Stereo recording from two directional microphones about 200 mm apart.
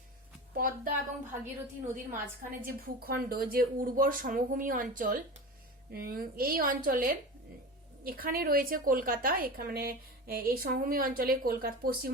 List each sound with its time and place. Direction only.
0.5 s a woman's voice: 45° right (ahead or behind)
2.4 s a woman's voice: 45° right (ahead or behind)